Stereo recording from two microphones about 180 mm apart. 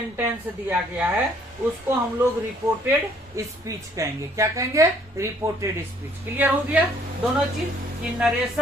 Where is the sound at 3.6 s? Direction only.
15° right (ahead or behind).